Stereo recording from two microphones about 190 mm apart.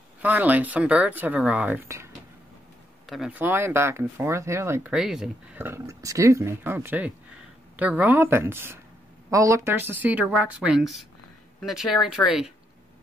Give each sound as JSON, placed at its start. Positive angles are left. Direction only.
{"t": 0.2, "sound": "speech", "side_deg": -10}
{"t": 3.1, "sound": "speech", "side_deg": -5}